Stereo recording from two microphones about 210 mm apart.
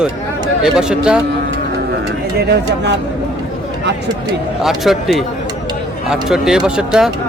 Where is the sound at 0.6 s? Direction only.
5° right (ahead or behind).